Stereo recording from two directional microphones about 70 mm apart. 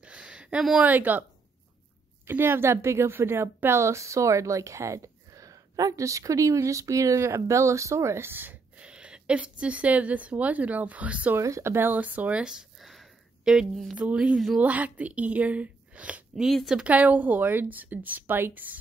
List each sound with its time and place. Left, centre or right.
0.0 s a sound: centre
0.7 s a woman's voice: right
2.2 s a woman's voice: right
8.7 s speech: centre
11.3 s a woman's voice: right
12.0 s speech: right; by 13.1 s centre
13.4 s a sound: centre
13.9 s speech: centre
16.4 s speech: centre
16.7 s a woman's voice: centre